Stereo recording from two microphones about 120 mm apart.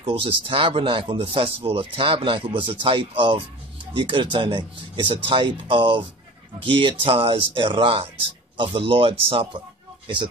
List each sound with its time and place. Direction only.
0.0 s speech: 45° right (ahead or behind)